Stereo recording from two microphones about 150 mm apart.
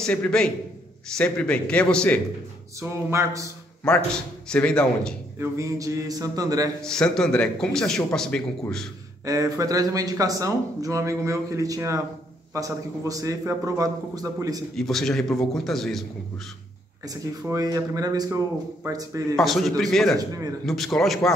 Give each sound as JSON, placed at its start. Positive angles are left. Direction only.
{"t": 0.0, "sound": "a man's voice", "side_deg": 5}
{"t": 2.8, "sound": "speech", "side_deg": -20}
{"t": 3.8, "sound": "a man's voice", "side_deg": 5}
{"t": 5.4, "sound": "speech", "side_deg": -20}
{"t": 6.8, "sound": "a man's voice", "side_deg": 5}
{"t": 9.2, "sound": "speech", "side_deg": -20}
{"t": 14.8, "sound": "a man's voice", "side_deg": 0}
{"t": 17.0, "sound": "speech", "side_deg": -25}
{"t": 19.3, "sound": "a man's voice", "side_deg": 0}
{"t": 20.2, "sound": "speech", "side_deg": -25}
{"t": 20.6, "sound": "a man's voice", "side_deg": 0}